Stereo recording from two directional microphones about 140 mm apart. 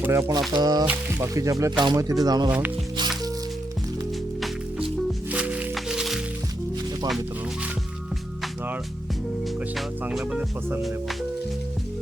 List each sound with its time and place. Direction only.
0.0 s speech: 20° right (ahead or behind)
2.5 s speech: 10° right (ahead or behind)
5.3 s music: 10° right (ahead or behind)
9.7 s speech: 5° right (ahead or behind)